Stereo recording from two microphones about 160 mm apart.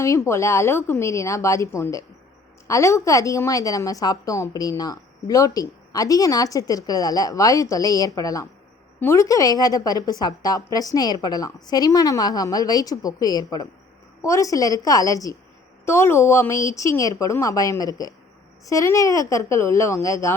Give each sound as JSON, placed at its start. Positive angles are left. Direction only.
{"t": 0.0, "sound": "a woman's voice", "side_deg": 20}